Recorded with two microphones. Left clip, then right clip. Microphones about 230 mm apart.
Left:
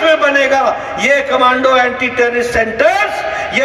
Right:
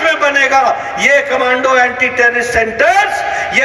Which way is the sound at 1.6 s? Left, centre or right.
Right.